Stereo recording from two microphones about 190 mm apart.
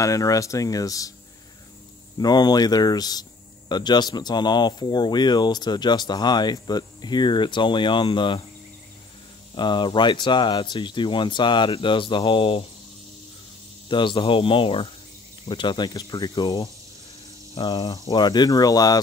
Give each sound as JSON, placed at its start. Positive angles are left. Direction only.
{"t": 0.0, "sound": "speech", "side_deg": 15}
{"t": 2.1, "sound": "speech", "side_deg": 20}
{"t": 9.6, "sound": "speech", "side_deg": 25}
{"t": 13.8, "sound": "speech", "side_deg": 25}